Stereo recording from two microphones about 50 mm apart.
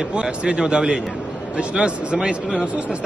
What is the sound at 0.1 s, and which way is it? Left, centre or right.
A man's voice, right.